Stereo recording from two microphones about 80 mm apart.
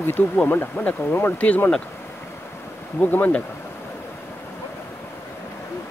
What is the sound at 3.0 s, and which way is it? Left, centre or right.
Speech, left.